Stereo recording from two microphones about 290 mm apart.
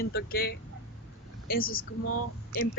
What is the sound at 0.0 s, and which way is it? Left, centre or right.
Speech, left.